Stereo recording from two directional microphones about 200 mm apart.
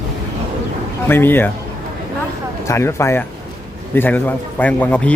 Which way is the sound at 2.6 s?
15° left (ahead or behind).